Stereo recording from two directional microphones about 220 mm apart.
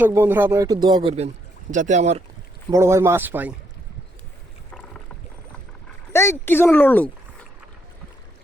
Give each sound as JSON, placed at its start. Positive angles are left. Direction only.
{"t": 0.0, "sound": "speech", "side_deg": -10}
{"t": 2.6, "sound": "speech", "side_deg": -15}
{"t": 4.7, "sound": "rowboat", "side_deg": 5}
{"t": 6.4, "sound": "speech", "side_deg": 10}